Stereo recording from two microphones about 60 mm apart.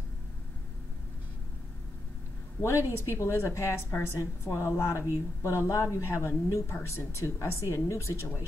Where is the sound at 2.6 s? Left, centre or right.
Left.